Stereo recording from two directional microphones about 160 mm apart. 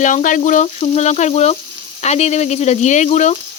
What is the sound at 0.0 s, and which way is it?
Speech, 50° left (ahead or behind).